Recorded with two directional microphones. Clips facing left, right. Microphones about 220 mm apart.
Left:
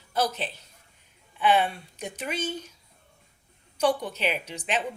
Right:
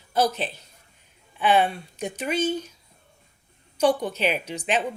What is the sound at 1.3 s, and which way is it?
Speech, 35° right (ahead or behind).